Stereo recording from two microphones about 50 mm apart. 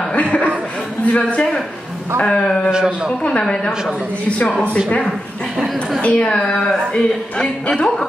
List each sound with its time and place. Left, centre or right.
0.1 s a sound: left
1.0 s a man's voice: left
2.7 s a man's voice: centre
3.3 s a woman's voice: centre
4.8 s a woman's voice: centre